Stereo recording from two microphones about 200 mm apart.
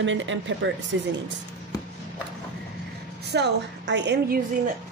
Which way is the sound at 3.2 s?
60° right (ahead or behind).